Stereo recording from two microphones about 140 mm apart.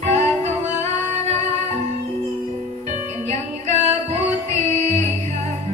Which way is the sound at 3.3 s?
50° right (ahead or behind).